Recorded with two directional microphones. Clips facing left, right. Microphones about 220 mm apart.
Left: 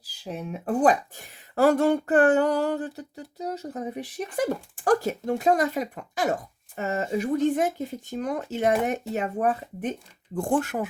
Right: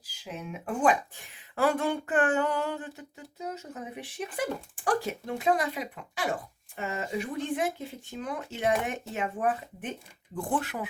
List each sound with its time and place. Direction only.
0.0 s speech: 35° left (ahead or behind)